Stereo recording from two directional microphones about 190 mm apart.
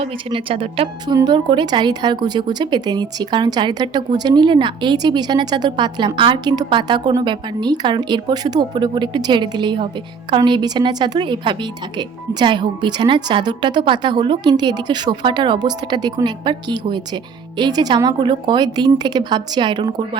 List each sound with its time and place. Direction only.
0.0 s a woman's voice: 30° right (ahead or behind)